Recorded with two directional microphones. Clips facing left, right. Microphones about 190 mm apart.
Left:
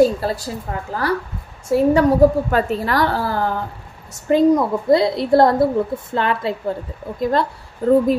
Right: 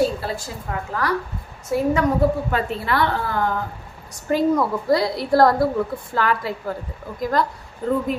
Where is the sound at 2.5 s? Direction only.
40° left (ahead or behind).